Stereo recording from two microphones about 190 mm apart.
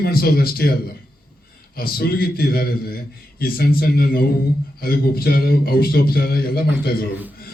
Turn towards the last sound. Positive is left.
turn(degrees=55)  # may be behind; listen again after turning